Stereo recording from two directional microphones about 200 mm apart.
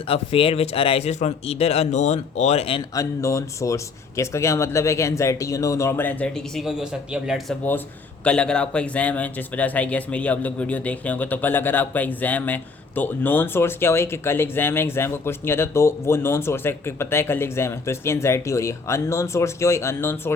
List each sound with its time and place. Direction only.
0.1 s speech: 30° left (ahead or behind)
2.9 s speech: 15° left (ahead or behind)